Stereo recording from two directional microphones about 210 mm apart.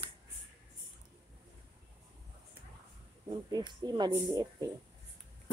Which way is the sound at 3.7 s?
20° right (ahead or behind).